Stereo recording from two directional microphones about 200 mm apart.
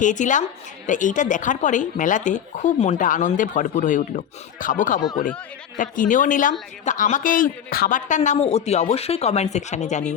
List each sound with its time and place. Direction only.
0.0 s speech: 40° left (ahead or behind)